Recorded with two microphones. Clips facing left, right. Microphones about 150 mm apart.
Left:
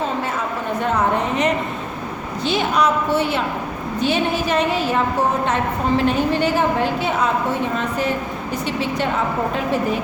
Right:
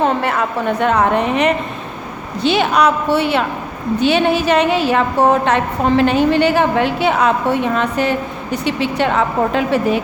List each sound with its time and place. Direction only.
0.0 s a woman's voice: 65° right (ahead or behind)